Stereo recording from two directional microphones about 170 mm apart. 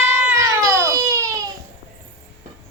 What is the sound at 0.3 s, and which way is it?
Baby cry, 15° right (ahead or behind).